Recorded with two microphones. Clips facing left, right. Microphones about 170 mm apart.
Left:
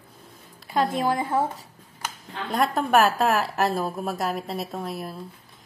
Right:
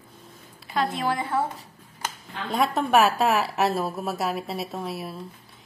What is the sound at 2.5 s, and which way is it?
A woman's voice, centre (ahead or behind).